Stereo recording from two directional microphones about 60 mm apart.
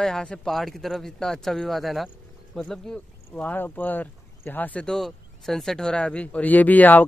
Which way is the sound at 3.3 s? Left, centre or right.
Left.